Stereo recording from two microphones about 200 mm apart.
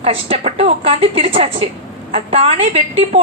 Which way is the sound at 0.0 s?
30° right (ahead or behind).